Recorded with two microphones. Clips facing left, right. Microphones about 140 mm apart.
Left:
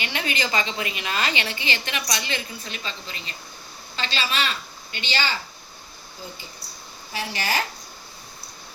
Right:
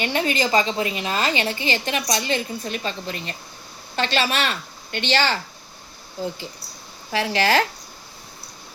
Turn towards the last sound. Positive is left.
turn(degrees=-90)